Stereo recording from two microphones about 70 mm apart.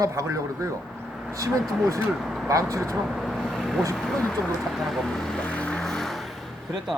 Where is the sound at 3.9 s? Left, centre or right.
Centre.